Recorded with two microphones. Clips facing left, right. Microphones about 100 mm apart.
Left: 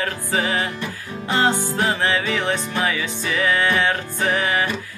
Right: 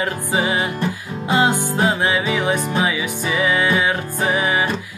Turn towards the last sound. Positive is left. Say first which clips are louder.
# right 2 dB
turn(degrees=-15)  # may be behind; listen again after turning